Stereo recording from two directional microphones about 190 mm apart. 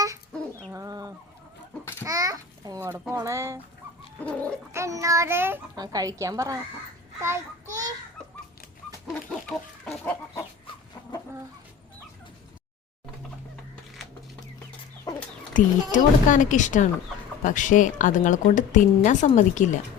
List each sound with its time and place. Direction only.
0.6 s bird: 15° right (ahead or behind)
2.0 s a child's voice: 20° right (ahead or behind)
4.2 s bird: 10° left (ahead or behind)
4.7 s a child's voice: 15° right (ahead or behind)
9.5 s chicken: 5° left (ahead or behind)
15.1 s chicken: 20° left (ahead or behind)
15.5 s a woman's voice: 40° left (ahead or behind)